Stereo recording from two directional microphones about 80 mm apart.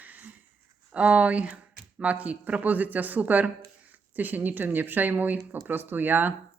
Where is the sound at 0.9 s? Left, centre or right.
Centre.